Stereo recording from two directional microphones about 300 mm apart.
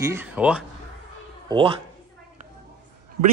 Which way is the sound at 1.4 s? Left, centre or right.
Centre.